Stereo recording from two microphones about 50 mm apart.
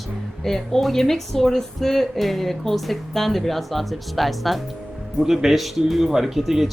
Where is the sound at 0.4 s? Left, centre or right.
Centre.